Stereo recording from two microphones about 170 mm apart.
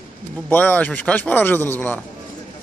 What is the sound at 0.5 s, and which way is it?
A man's voice, 10° left (ahead or behind).